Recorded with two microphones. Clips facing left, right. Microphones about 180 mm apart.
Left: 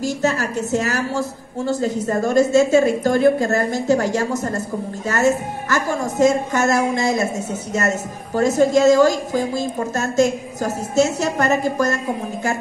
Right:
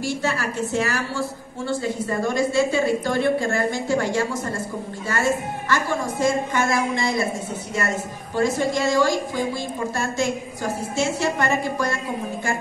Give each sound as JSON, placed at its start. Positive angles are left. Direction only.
{"t": 0.0, "sound": "a woman's voice", "side_deg": 40}